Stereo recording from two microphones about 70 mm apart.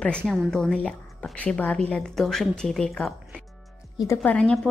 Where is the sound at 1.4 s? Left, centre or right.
Centre.